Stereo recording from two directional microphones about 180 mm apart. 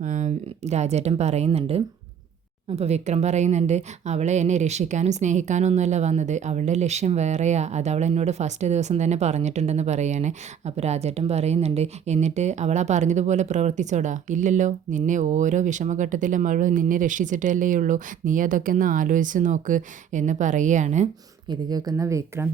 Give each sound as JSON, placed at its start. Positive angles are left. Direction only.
{"t": 0.0, "sound": "a woman's voice", "side_deg": -40}
{"t": 21.5, "sound": "speech", "side_deg": -20}